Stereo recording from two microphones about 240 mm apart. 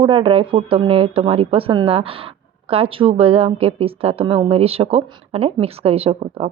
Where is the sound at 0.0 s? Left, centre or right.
Right.